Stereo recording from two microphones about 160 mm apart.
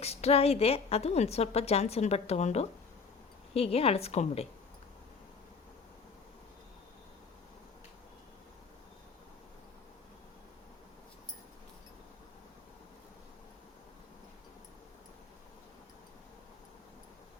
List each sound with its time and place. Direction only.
0.0 s a woman's voice: 40° left (ahead or behind)